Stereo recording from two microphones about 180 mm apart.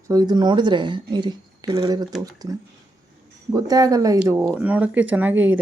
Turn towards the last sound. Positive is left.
turn(degrees=-10)  # may be behind; listen again after turning